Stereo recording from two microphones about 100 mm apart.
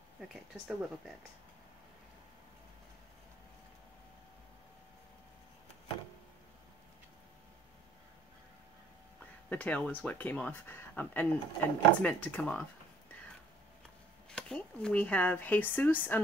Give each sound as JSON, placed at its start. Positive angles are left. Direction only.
{"t": 0.3, "sound": "speech", "side_deg": 0}
{"t": 9.5, "sound": "speech", "side_deg": 15}
{"t": 14.3, "sound": "speech", "side_deg": 5}